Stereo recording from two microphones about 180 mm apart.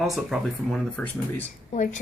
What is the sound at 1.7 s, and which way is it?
Speech, 45° left (ahead or behind).